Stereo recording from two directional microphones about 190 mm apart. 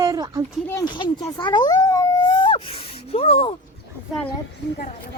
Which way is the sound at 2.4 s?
25° left (ahead or behind).